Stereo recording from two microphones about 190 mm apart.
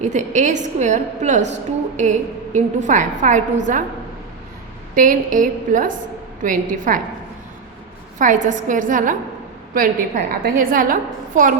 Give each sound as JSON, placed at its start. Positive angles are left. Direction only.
{"t": 0.0, "sound": "a woman's voice", "side_deg": -40}
{"t": 4.9, "sound": "a woman's voice", "side_deg": -45}
{"t": 8.2, "sound": "a woman's voice", "side_deg": -40}